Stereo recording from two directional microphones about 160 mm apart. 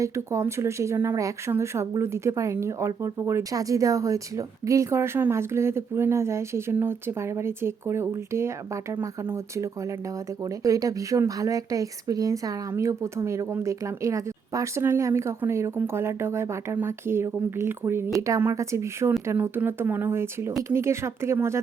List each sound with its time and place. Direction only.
0.0 s speech: 20° right (ahead or behind)